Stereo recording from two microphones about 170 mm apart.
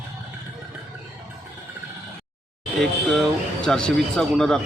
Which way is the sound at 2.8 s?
Centre (ahead or behind).